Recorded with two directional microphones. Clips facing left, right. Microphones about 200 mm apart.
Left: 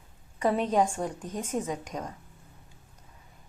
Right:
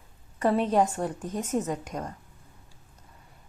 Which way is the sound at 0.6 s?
5° right (ahead or behind).